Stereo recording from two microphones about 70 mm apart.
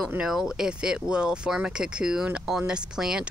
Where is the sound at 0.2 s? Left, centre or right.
Centre.